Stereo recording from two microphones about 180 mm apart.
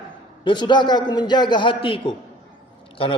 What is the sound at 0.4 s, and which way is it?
A man's voice, 25° left (ahead or behind).